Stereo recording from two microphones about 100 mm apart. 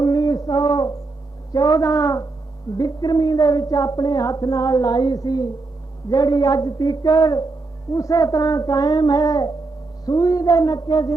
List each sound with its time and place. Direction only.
0.0 s mantra: 40° left (ahead or behind)
1.5 s speech: 40° left (ahead or behind)